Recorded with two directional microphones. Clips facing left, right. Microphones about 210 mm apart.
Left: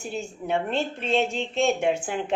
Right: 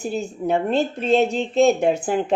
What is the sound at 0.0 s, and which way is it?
A woman's voice, 40° right (ahead or behind).